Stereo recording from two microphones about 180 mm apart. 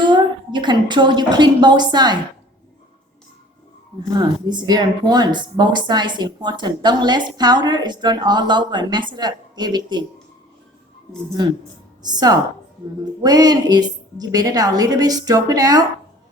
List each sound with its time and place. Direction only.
0.0 s a woman's voice: 25° right (ahead or behind)
4.2 s a woman's voice: 25° right (ahead or behind)
12.0 s a woman's voice: 20° right (ahead or behind)